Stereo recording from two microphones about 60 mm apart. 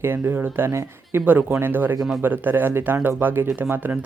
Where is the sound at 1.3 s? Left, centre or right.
Right.